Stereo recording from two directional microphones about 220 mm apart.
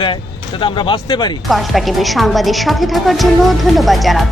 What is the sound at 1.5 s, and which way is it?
A woman's voice, centre (ahead or behind).